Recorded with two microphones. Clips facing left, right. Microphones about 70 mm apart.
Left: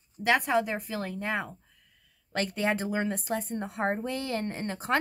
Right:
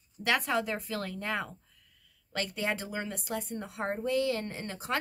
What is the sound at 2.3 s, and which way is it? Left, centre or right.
Speech, left.